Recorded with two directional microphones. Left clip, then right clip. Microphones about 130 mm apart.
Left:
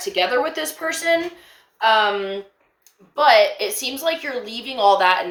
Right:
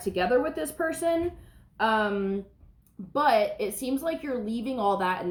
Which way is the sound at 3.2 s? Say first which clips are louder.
Left 10 dB; 15° left (ahead or behind).